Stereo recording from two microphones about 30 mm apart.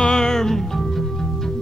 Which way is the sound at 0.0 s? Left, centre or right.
Left.